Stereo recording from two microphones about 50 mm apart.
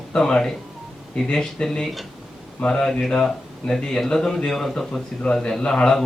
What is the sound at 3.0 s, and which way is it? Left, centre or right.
Speech, centre.